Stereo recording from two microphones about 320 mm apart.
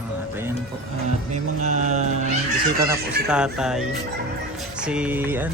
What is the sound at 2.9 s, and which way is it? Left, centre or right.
Music, centre.